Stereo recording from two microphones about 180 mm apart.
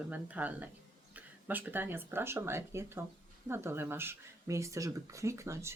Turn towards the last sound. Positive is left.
turn(degrees=-15)  # may be behind; listen again after turning